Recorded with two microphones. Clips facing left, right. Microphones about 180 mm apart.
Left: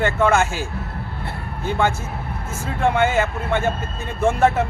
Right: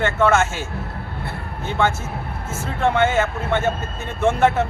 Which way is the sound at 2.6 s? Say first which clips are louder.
Even; 10° left (ahead or behind).